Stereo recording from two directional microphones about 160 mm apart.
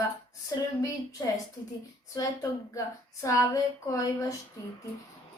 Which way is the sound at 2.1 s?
20° left (ahead or behind).